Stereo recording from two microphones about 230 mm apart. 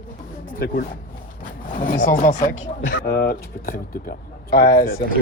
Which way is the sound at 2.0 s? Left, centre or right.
Left.